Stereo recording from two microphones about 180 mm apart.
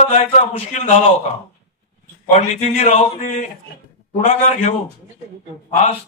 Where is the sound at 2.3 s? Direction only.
35° left (ahead or behind).